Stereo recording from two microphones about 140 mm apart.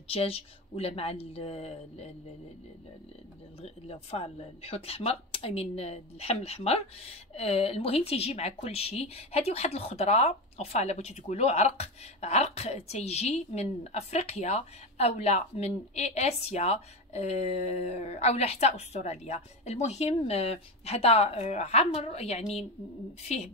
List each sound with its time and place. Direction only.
0.1 s a woman's voice: 45° left (ahead or behind)
3.6 s a woman's voice: 50° left (ahead or behind)